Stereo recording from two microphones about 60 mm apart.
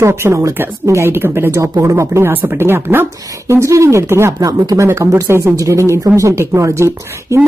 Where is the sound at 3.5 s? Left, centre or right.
Right.